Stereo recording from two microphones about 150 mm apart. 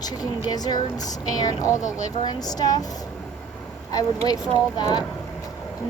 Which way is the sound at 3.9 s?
25° left (ahead or behind).